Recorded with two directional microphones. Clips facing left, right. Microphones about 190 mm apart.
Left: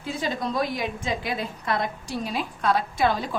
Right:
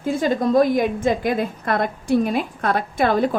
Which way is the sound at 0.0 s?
45° right (ahead or behind).